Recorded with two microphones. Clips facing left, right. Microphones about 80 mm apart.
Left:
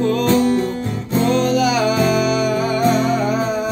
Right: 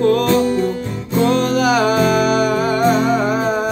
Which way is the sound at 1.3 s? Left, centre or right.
Right.